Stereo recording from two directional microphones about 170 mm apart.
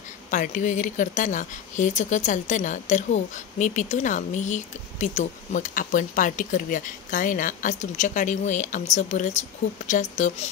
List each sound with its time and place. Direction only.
0.3 s speech: 50° left (ahead or behind)